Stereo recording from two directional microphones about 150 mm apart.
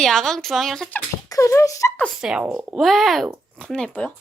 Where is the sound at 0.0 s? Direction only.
Centre (ahead or behind).